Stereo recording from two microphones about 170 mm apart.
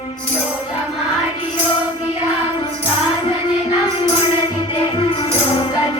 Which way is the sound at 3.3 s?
30° left (ahead or behind).